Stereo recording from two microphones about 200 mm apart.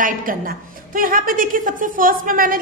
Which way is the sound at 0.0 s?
45° right (ahead or behind).